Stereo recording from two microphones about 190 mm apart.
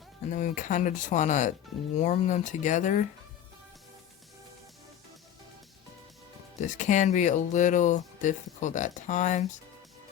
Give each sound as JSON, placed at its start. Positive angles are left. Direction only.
{"t": 0.3, "sound": "speech", "side_deg": 40}
{"t": 6.6, "sound": "speech", "side_deg": 40}